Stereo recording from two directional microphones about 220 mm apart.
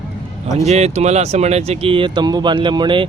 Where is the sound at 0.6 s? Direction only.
30° right (ahead or behind).